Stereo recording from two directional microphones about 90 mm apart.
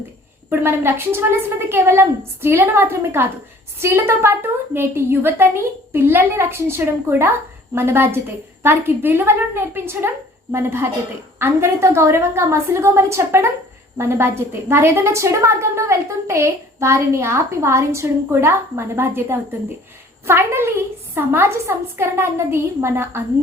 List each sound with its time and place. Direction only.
0.6 s a woman's voice: 25° right (ahead or behind)